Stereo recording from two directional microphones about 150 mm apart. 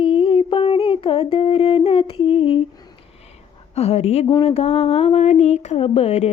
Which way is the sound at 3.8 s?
45° left (ahead or behind).